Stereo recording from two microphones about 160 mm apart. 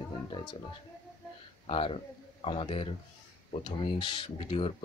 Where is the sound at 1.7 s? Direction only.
40° left (ahead or behind).